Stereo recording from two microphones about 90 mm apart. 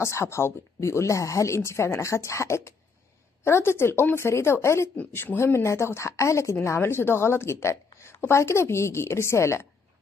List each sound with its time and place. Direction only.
0.0 s a woman's voice: 30° left (ahead or behind)